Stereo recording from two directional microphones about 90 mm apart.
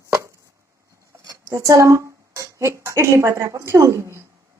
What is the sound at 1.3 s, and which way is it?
A woman's voice, 40° right (ahead or behind).